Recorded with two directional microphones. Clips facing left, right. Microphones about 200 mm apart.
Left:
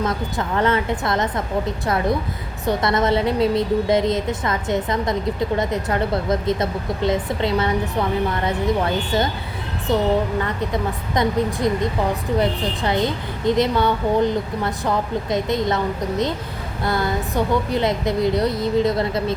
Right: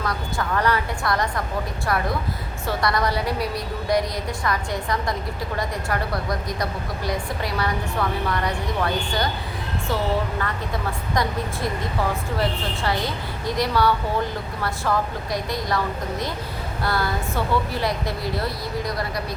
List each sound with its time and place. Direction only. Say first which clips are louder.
0.0 s a woman's voice: left 4 dB; 20° left (ahead or behind)
2.6 s a woman's voice: left 5 dB; 20° left (ahead or behind)